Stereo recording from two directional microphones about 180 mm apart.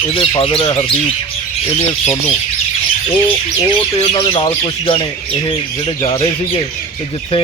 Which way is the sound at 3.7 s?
35° left (ahead or behind).